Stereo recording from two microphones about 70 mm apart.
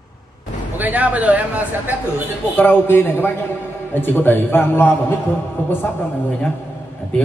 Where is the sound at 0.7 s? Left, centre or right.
Right.